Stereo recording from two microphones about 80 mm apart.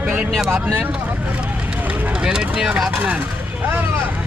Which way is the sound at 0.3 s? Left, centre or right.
Centre.